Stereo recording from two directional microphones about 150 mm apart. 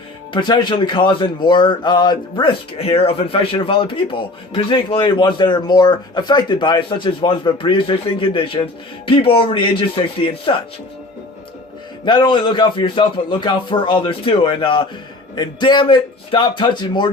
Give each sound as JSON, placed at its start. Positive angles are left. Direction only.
{"t": 0.3, "sound": "speech", "side_deg": 30}
{"t": 12.0, "sound": "speech", "side_deg": 30}